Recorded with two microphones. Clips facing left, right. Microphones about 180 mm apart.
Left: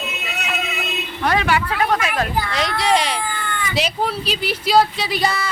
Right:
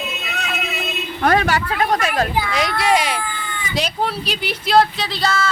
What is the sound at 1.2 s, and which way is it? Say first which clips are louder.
Speech: right 2 dB; 50° right (ahead or behind).